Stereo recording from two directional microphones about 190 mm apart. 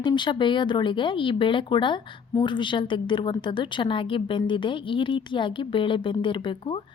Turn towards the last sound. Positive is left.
turn(degrees=25)  # may be behind; listen again after turning